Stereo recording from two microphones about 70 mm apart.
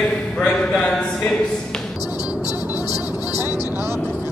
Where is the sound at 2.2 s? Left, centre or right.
Left.